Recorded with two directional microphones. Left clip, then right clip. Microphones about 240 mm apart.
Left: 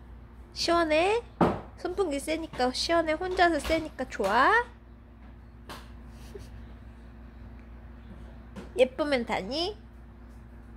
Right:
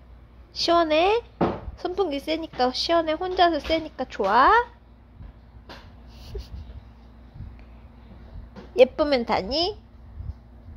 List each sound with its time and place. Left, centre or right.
0.5 s speech: centre
8.7 s speech: centre